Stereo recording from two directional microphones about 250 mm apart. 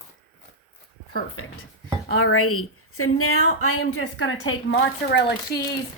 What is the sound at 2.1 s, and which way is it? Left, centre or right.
A woman's voice, left.